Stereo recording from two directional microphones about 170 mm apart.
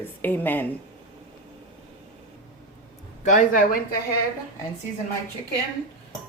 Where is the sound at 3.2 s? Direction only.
50° left (ahead or behind).